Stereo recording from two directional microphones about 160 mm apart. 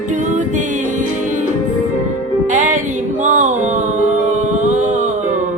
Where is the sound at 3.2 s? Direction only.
50° right (ahead or behind).